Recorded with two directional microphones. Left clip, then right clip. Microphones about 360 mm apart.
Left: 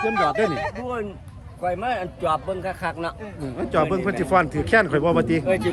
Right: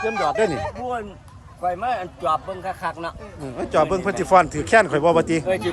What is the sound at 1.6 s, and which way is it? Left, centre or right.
A man's voice, centre.